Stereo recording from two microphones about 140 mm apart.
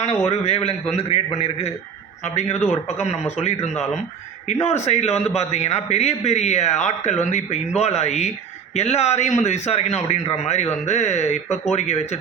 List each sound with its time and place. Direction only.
0.3 s a man's voice: 50° left (ahead or behind)